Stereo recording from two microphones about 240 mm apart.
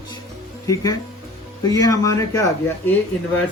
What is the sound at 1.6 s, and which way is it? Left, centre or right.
Speech, centre.